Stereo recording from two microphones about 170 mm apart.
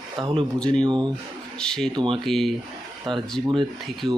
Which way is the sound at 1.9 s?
30° right (ahead or behind).